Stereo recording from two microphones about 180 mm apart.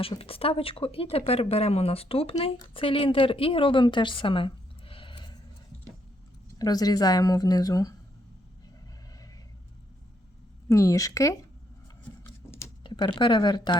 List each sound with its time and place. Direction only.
0.0 s a woman's voice: 30° left (ahead or behind)
6.6 s speech: 20° left (ahead or behind)
10.7 s a woman's voice: 15° left (ahead or behind)
12.2 s a sound: 15° left (ahead or behind)
12.8 s speech: 25° left (ahead or behind)